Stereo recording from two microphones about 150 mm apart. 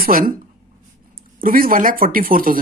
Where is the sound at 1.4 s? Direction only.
70° right (ahead or behind).